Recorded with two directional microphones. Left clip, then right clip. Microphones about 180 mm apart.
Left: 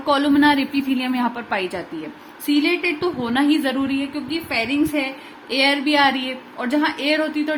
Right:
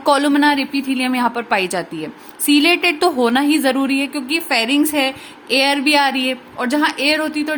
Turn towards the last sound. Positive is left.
turn(degrees=-30)  # may be behind; listen again after turning